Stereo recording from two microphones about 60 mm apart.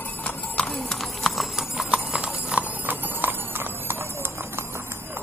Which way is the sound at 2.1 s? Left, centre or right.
Centre.